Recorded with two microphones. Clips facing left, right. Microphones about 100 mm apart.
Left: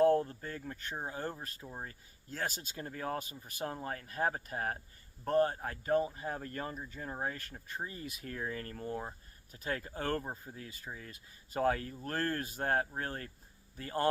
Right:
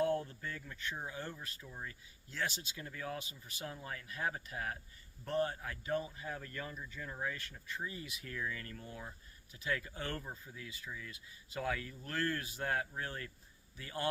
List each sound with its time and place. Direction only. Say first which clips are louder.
0.0 s speech: left 7 dB; 40° left (ahead or behind)